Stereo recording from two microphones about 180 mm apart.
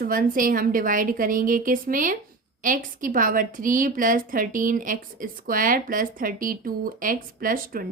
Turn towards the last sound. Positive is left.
turn(degrees=-50)  # may be behind; listen again after turning